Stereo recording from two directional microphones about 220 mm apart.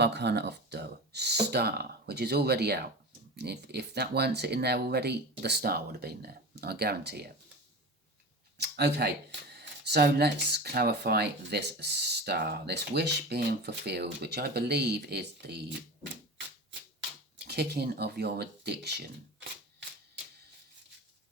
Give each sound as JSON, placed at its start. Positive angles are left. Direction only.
{"t": 0.0, "sound": "speech", "side_deg": -50}
{"t": 8.5, "sound": "a sound", "side_deg": -50}
{"t": 9.5, "sound": "speech", "side_deg": -45}
{"t": 17.3, "sound": "speech", "side_deg": -45}